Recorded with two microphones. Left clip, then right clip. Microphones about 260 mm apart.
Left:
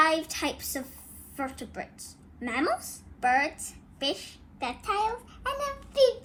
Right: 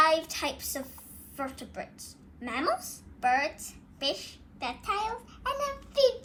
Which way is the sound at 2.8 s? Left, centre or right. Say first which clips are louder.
Left 2 dB; right.